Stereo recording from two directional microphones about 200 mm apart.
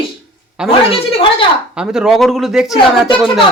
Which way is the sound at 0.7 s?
30° left (ahead or behind).